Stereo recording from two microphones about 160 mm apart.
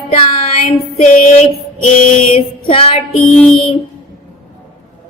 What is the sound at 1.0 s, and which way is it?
Female singing, 45° left (ahead or behind).